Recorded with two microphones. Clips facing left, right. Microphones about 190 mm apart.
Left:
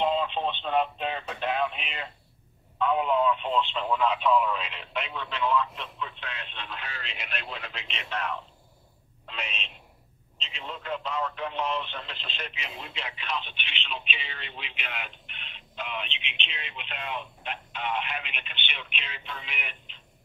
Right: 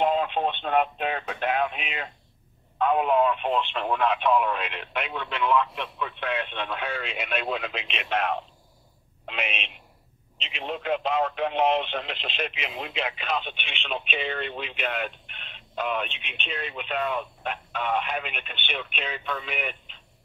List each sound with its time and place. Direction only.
0.0 s a woman's voice: 55° right (ahead or behind)
10.5 s speech: 70° right (ahead or behind); by 19.7 s 45° right (ahead or behind)